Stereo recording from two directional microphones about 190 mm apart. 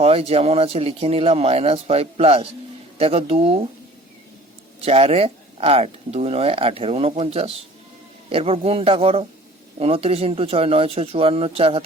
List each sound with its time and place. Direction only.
0.0 s speech: 30° right (ahead or behind)
4.9 s a man's voice: 30° right (ahead or behind)